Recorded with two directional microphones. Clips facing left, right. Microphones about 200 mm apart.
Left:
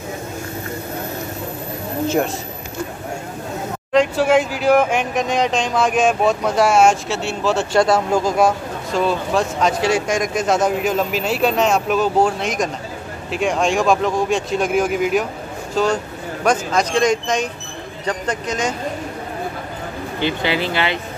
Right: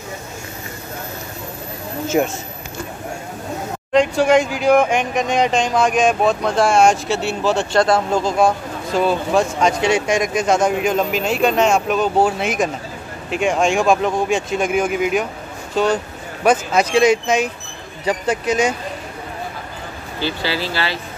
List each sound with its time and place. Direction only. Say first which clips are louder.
3.9 s speech: right 1 dB; 5° left (ahead or behind)
7.7 s speech: left 2 dB; 10° left (ahead or behind); by 18.8 s 10° right (ahead or behind)
20.2 s speech: left 2 dB; 20° left (ahead or behind)